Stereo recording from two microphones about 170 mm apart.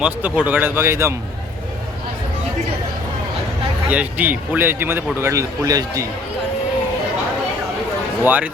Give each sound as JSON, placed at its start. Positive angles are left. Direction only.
{"t": 0.0, "sound": "a man's voice", "side_deg": -10}
{"t": 3.8, "sound": "a man's voice", "side_deg": -10}
{"t": 8.2, "sound": "a man's voice", "side_deg": -10}